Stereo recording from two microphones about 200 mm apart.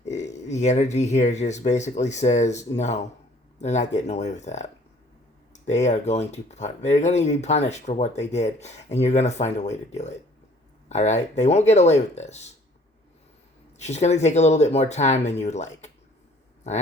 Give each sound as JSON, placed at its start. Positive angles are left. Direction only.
{"t": 0.1, "sound": "speech", "side_deg": 35}
{"t": 13.8, "sound": "speech", "side_deg": 35}